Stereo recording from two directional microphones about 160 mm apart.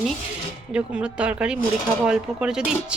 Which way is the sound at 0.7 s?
5° right (ahead or behind).